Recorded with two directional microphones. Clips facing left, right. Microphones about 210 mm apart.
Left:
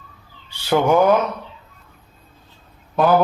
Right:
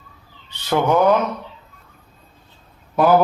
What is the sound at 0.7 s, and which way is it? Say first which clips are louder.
Speech: left 2 dB; 5° left (ahead or behind).